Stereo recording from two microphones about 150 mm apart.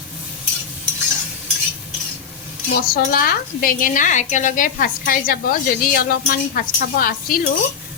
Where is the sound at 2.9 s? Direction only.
80° left.